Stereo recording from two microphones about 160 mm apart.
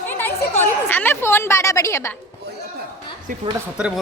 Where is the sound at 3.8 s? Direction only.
5° right (ahead or behind).